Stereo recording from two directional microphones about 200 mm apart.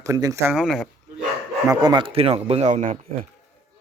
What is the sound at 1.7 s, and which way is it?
Speech, 20° right (ahead or behind).